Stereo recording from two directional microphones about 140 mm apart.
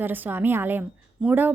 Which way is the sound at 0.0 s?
15° right (ahead or behind).